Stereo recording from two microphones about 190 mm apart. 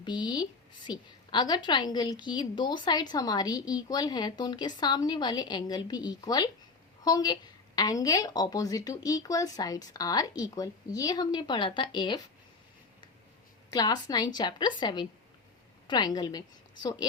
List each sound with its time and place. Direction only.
0.0 s a woman's voice: 25° left (ahead or behind)
13.7 s a woman's voice: 20° left (ahead or behind)